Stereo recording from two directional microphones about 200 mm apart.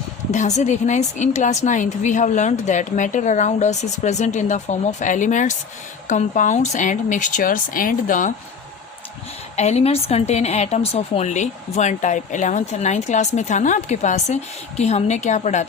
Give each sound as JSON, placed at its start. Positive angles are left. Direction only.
{"t": 0.3, "sound": "a woman's voice", "side_deg": 35}
{"t": 9.6, "sound": "a woman's voice", "side_deg": 35}